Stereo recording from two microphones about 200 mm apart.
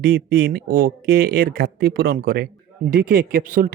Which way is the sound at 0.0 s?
45° right (ahead or behind).